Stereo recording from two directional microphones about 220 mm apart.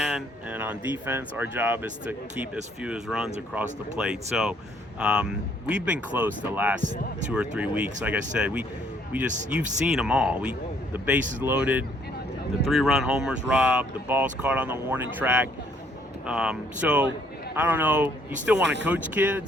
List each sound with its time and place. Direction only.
0.0 s speech: 5° right (ahead or behind)